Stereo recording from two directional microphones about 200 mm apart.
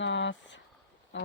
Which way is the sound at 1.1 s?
65° left (ahead or behind).